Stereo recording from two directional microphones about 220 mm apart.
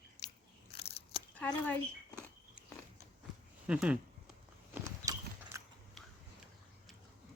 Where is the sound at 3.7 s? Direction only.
5° right (ahead or behind).